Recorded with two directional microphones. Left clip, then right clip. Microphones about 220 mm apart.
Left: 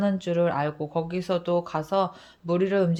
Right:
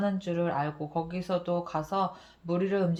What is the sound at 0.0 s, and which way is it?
Speech, 50° left (ahead or behind).